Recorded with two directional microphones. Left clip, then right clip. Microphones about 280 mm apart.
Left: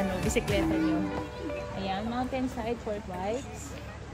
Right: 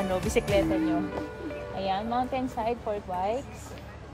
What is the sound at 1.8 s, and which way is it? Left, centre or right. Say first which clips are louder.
Speech: right 6 dB; centre.